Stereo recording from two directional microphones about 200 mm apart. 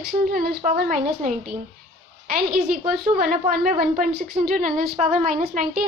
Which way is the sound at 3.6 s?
45° right (ahead or behind).